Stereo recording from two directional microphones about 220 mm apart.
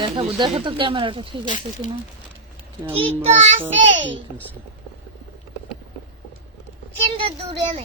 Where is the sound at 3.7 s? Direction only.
55° right (ahead or behind).